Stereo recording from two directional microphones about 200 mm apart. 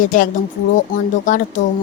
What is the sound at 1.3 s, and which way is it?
Speech, 40° left (ahead or behind).